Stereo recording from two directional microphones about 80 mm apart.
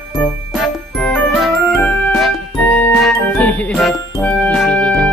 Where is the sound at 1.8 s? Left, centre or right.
Centre.